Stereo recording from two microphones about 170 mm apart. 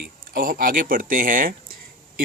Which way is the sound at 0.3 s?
55° right (ahead or behind).